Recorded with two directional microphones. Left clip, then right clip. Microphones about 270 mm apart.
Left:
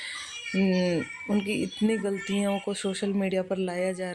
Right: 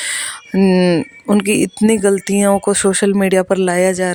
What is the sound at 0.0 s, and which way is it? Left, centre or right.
Speech, right.